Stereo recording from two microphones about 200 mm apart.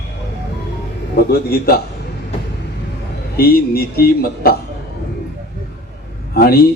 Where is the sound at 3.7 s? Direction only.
50° left (ahead or behind).